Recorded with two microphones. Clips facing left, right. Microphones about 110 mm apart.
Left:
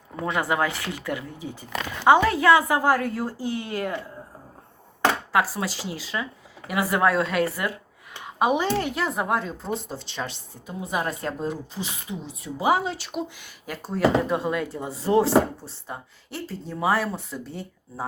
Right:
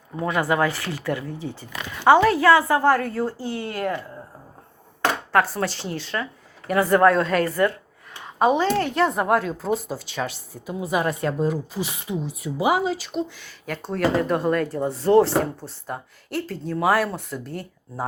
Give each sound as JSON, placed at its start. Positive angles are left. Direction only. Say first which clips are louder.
{"t": 0.3, "sound": "a woman's voice", "louder": "right 3 dB", "side_deg": 20}
{"t": 3.4, "sound": "speech", "louder": "even", "side_deg": -45}
{"t": 5.3, "sound": "a woman's voice", "louder": "right 3 dB", "side_deg": 5}